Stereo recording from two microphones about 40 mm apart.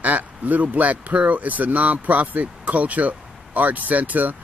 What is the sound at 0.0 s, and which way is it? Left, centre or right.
Speech, right.